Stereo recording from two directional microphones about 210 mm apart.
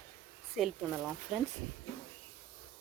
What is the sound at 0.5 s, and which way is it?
Speech, centre (ahead or behind).